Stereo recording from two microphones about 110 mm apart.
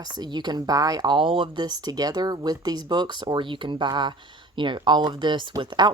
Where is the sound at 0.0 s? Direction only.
40° right (ahead or behind).